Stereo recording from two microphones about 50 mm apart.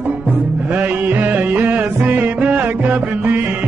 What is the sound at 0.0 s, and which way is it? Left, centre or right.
Music, right.